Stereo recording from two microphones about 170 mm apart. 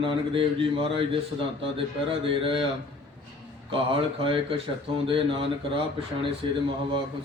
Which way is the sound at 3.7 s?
30° right (ahead or behind).